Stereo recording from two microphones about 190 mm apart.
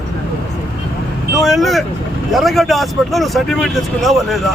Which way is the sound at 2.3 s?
Centre (ahead or behind).